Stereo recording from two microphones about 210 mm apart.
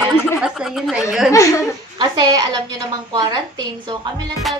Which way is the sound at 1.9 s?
20° right (ahead or behind).